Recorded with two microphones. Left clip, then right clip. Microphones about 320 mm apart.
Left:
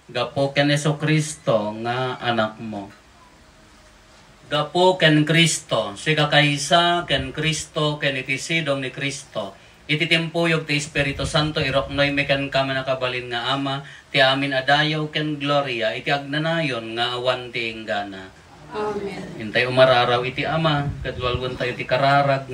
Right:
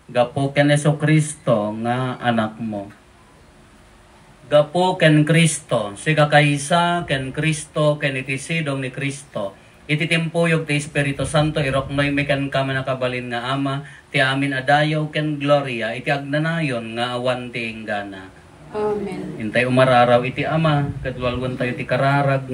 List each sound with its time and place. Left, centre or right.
0.1 s speech: centre
4.5 s speech: centre
19.5 s speech: centre